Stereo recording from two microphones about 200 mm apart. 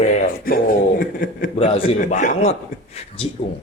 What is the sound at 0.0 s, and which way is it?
Speech, 40° left (ahead or behind).